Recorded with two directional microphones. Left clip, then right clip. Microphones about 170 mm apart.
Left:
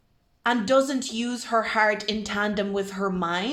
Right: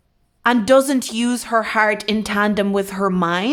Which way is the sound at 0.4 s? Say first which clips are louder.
Right 7 dB; 40° right (ahead or behind).